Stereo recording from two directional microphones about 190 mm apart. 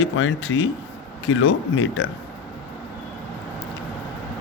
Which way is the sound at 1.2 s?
90° left.